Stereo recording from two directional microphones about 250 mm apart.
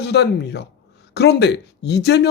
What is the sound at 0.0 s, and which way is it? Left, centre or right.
Speech, left.